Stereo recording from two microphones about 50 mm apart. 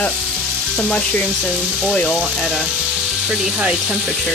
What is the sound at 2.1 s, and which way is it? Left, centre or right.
Speech, centre.